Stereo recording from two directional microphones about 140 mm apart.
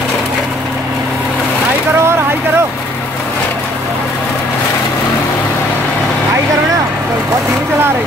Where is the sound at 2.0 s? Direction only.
15° right (ahead or behind).